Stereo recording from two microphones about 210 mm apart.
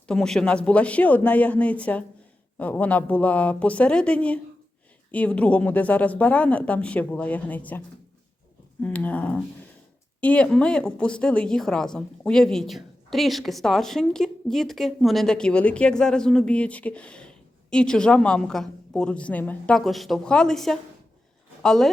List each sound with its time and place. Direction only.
0.1 s speech: 5° left (ahead or behind)
8.8 s a woman's voice: 5° left (ahead or behind)